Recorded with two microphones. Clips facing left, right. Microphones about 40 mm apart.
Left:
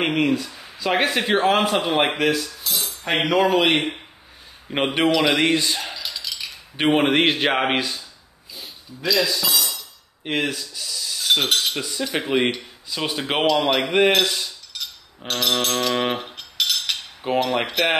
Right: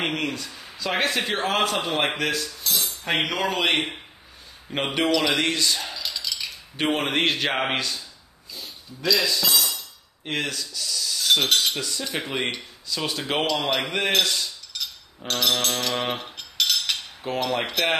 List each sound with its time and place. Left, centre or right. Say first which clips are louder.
0.0 s a man's voice: left 6 dB; centre
4.7 s a man's voice: left 3 dB; centre
5.4 s a man's voice: left 4 dB; left
5.9 s a sound: even; centre
6.8 s a man's voice: left 5 dB; left
8.5 s cutlery: left 1 dB; centre
10.2 s cutlery: left 4 dB; centre
11.7 s a man's voice: left 3 dB; centre
12.8 s a man's voice: left 2 dB; left
13.5 s speech: left 5 dB; centre
14.2 s cutlery: left 2 dB; centre
14.7 s a sound: even; centre
17.4 s a man's voice: left 3 dB; centre